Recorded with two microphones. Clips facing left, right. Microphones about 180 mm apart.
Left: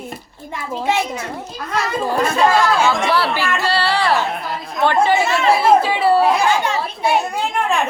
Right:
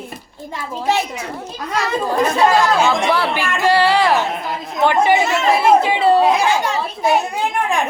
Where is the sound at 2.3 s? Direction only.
15° right (ahead or behind).